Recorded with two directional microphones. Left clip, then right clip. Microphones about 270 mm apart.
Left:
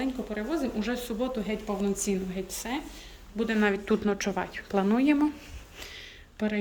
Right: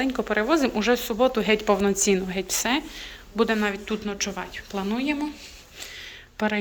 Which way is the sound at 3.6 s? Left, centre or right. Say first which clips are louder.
Left 1 dB; centre.